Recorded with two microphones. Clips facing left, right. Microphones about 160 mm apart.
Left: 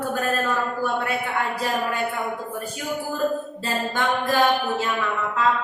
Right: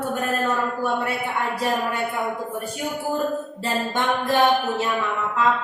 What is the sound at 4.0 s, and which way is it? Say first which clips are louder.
Music: right 1 dB; 20° right (ahead or behind).